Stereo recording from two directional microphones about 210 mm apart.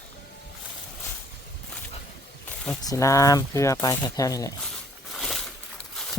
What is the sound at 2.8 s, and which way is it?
Speech, 15° left (ahead or behind).